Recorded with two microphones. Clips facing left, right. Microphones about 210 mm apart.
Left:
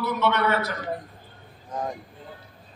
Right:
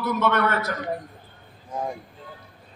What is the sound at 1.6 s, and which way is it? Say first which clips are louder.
Vehicle: right 1 dB; 10° right (ahead or behind).